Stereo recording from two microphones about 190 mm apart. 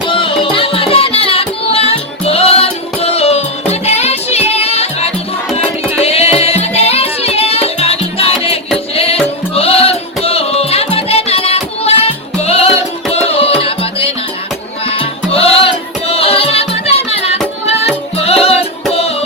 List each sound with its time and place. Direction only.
0.1 s music: 25° left (ahead or behind)